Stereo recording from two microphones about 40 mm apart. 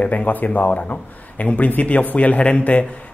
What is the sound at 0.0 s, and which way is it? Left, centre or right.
Speech, left.